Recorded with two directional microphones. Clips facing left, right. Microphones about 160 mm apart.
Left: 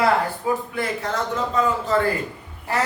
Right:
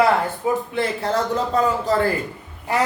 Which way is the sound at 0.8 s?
30° right (ahead or behind).